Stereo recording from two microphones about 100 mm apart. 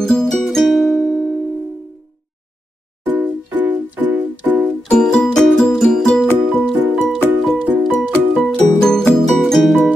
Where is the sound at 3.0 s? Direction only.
15° right (ahead or behind).